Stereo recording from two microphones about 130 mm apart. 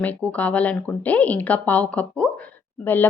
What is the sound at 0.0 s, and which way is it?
A woman's voice, 10° left (ahead or behind).